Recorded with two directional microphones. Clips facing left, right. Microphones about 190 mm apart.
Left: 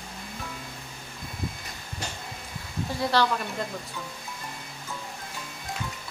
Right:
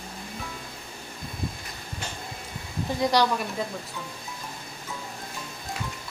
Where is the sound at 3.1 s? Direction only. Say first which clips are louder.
Right 1 dB; 15° right (ahead or behind).